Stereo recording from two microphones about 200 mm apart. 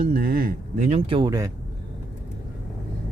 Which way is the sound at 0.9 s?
25° right (ahead or behind).